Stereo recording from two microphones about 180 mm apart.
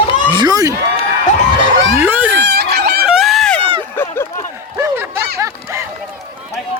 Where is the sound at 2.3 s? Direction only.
80° right.